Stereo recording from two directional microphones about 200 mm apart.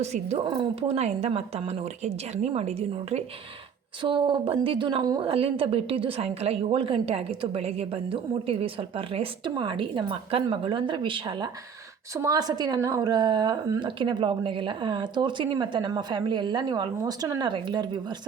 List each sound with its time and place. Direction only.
0.0 s a woman's voice: 30° right (ahead or behind)